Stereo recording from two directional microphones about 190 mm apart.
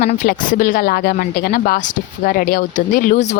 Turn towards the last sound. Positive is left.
turn(degrees=40)  # may be behind; listen again after turning